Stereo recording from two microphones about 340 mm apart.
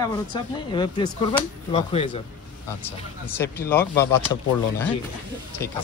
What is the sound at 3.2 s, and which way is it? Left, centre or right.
Speech, centre.